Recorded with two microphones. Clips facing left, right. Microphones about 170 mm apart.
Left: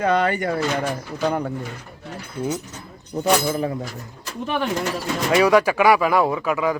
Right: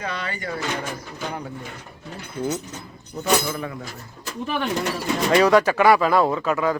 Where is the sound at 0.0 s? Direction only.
55° left (ahead or behind).